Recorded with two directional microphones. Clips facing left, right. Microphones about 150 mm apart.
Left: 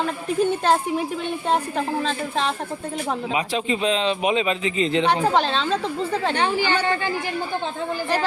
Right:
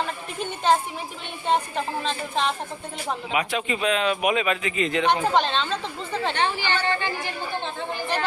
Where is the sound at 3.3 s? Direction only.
30° left (ahead or behind).